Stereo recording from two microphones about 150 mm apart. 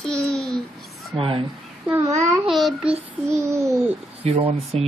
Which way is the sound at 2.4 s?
Centre (ahead or behind).